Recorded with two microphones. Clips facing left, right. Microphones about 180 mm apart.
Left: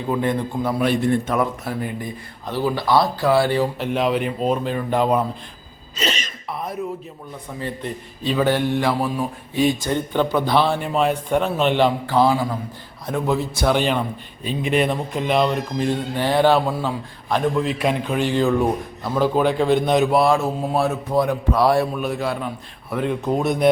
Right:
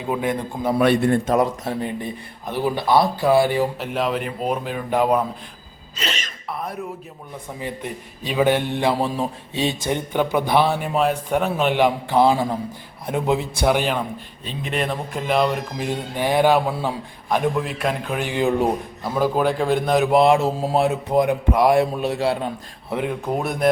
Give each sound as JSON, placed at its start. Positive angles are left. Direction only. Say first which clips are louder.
{"t": 0.1, "sound": "a man's voice", "louder": "left 2 dB", "side_deg": -10}
{"t": 0.8, "sound": "a man's voice", "louder": "right 3 dB", "side_deg": -65}
{"t": 1.3, "sound": "a man's voice", "louder": "right 2 dB", "side_deg": -30}
{"t": 3.8, "sound": "a man's voice", "louder": "left 3 dB", "side_deg": 0}
{"t": 7.6, "sound": "a man's voice", "louder": "left 2 dB", "side_deg": -15}
{"t": 14.4, "sound": "speech", "louder": "left 5 dB", "side_deg": 5}
{"t": 20.1, "sound": "a man's voice", "louder": "right 2 dB", "side_deg": -20}
{"t": 21.9, "sound": "a man's voice", "louder": "right 2 dB", "side_deg": -30}
{"t": 23.0, "sound": "speech", "louder": "left 5 dB", "side_deg": -5}